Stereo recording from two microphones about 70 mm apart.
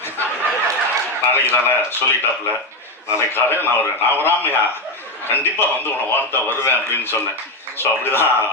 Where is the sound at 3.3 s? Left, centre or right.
Left.